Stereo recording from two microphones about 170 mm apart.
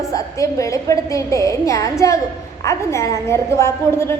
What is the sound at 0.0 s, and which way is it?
A woman's voice, 20° left (ahead or behind).